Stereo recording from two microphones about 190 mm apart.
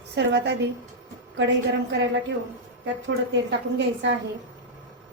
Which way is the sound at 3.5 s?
70° right (ahead or behind).